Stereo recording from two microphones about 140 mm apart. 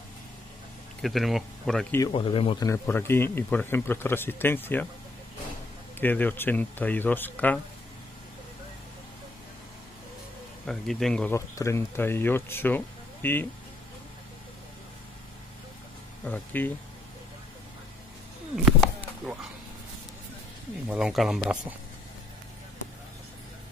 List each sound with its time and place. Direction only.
1.0 s speech: centre (ahead or behind)
2.0 s speech: 40° left (ahead or behind)
2.6 s speech: 20° left (ahead or behind)
5.9 s speech: 15° left (ahead or behind)
10.7 s speech: 5° left (ahead or behind)
11.3 s speech: 20° left (ahead or behind)
16.3 s speech: 15° left (ahead or behind)
18.7 s chop: 10° right (ahead or behind)
20.9 s speech: centre (ahead or behind)